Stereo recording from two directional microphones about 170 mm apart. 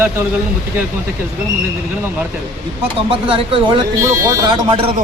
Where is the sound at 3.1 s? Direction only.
30° right (ahead or behind).